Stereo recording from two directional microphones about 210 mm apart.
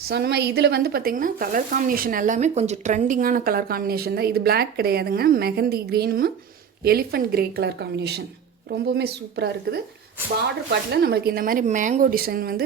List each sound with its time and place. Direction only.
0.1 s speech: 50° right (ahead or behind)